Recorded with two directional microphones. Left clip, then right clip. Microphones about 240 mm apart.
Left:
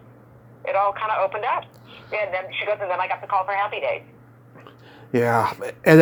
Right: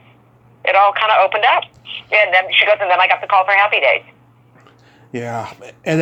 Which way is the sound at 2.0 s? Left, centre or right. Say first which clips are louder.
Right 13 dB; right.